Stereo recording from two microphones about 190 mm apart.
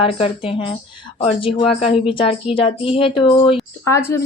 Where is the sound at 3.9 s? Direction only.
15° left (ahead or behind).